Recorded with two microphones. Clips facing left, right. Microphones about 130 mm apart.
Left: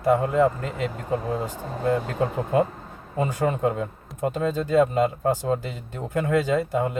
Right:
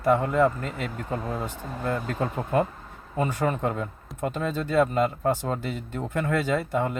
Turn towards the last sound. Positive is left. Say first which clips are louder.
# left 2 dB
turn(degrees=15)  # may be behind; listen again after turning